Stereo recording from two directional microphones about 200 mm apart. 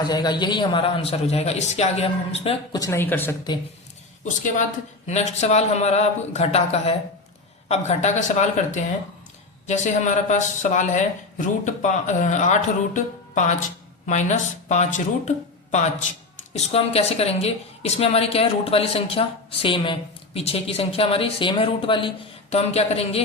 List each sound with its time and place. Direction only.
0.0 s a man's voice: 20° left (ahead or behind)
2.7 s speech: 15° left (ahead or behind)
5.0 s speech: 35° left (ahead or behind)
16.6 s a man's voice: 30° left (ahead or behind)